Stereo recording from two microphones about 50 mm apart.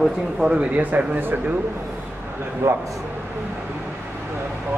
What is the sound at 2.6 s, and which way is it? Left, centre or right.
Speech, right.